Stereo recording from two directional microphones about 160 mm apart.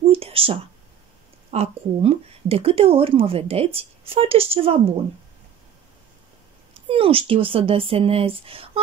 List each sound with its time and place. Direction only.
0.1 s a sound: 35° right (ahead or behind)
1.5 s speech: 40° right (ahead or behind)
6.7 s speech: 35° right (ahead or behind)